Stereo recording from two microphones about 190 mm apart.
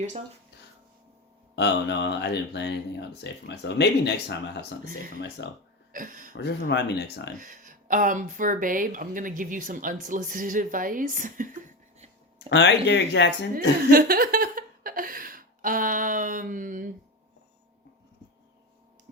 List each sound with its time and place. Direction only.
1.5 s speech: 65° left (ahead or behind)
5.9 s speech: 45° right (ahead or behind)
6.3 s speech: 70° left (ahead or behind)
7.3 s speech: 45° right (ahead or behind)
12.5 s speech: 65° left (ahead or behind)
13.9 s speech: 50° right (ahead or behind)